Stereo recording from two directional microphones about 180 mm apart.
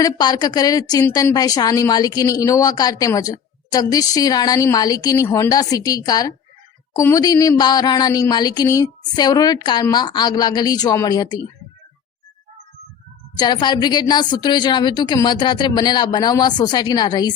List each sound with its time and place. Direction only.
0.0 s a woman's voice: 25° left (ahead or behind)
13.3 s a woman's voice: 25° left (ahead or behind)